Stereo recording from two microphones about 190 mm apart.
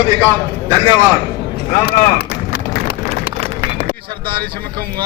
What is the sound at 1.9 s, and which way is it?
Run, 55° left (ahead or behind).